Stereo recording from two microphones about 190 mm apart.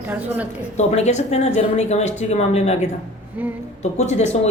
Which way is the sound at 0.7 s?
35° left (ahead or behind).